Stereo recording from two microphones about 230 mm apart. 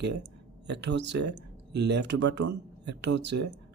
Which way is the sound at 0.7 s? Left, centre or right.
Right.